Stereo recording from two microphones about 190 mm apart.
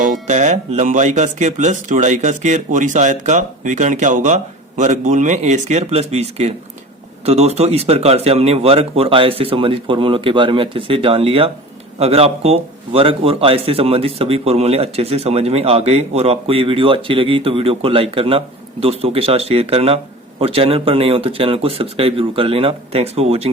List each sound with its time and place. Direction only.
0.0 s a man's voice: 40° right (ahead or behind)